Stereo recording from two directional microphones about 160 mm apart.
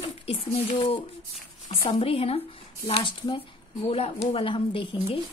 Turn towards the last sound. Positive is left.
turn(degrees=35)  # may be behind; listen again after turning